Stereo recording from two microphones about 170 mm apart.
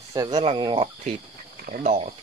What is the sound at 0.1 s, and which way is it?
Speech, 25° right (ahead or behind).